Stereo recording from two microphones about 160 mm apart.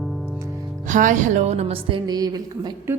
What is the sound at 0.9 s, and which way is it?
Speech, 50° right (ahead or behind).